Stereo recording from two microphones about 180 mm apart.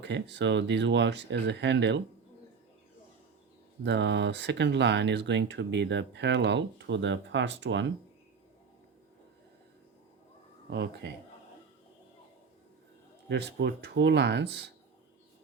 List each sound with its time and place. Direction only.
0.0 s speech: 75° right (ahead or behind)
3.8 s speech: 75° right (ahead or behind)
10.7 s speech: 75° right (ahead or behind)
13.2 s speech: 70° right (ahead or behind)